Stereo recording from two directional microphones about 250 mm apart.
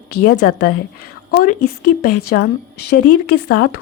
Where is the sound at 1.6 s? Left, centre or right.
Left.